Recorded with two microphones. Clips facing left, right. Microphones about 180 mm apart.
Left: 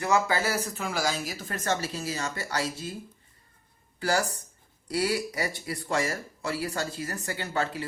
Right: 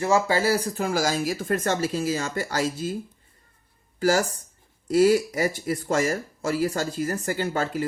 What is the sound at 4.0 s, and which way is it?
Speech, 45° right (ahead or behind).